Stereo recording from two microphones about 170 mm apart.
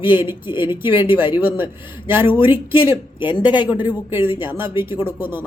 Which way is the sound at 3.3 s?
25° left (ahead or behind).